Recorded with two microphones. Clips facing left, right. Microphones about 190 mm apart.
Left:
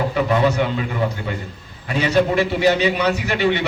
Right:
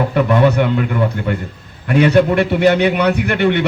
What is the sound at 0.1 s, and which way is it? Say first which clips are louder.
A man's voice: right 4 dB; 60° right (ahead or behind).